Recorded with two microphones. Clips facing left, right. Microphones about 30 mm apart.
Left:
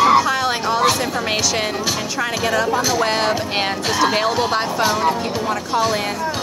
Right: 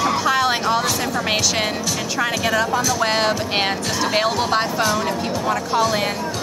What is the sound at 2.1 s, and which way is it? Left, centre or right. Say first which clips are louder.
Speech: right 1 dB; centre.